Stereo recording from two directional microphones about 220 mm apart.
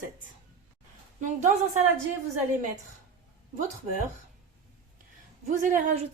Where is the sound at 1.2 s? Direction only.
35° right (ahead or behind).